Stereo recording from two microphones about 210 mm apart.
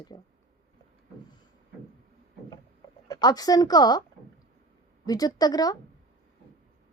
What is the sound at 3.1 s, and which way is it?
Speech, 20° left (ahead or behind).